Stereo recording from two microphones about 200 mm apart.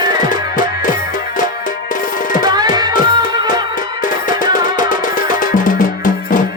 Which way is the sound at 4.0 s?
45° left (ahead or behind).